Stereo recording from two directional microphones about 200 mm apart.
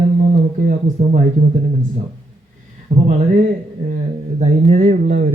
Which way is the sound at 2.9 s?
30° right (ahead or behind).